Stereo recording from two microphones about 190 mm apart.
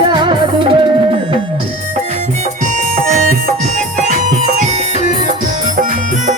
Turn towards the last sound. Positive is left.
turn(degrees=-45)  # may be behind; listen again after turning